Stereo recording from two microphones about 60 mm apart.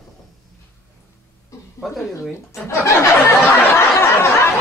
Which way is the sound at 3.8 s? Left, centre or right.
Left.